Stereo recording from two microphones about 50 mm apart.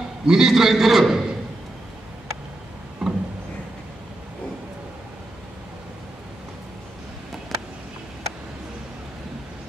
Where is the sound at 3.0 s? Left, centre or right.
Centre.